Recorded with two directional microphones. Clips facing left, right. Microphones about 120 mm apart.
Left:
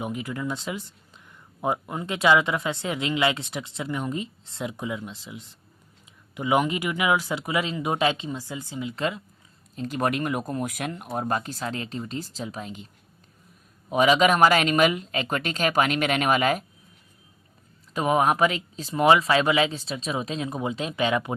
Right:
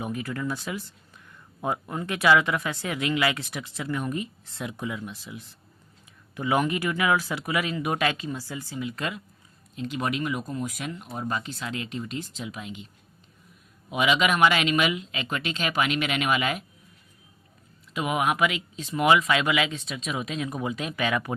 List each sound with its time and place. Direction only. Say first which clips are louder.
0.0 s speech: even; 20° left (ahead or behind)
9.7 s speech: left 3 dB; 40° left (ahead or behind)
13.9 s speech: left 4 dB; 40° left (ahead or behind)
17.9 s speech: left 4 dB; 35° left (ahead or behind)